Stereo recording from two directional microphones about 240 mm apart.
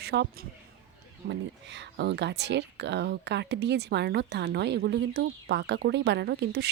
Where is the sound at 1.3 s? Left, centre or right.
Right.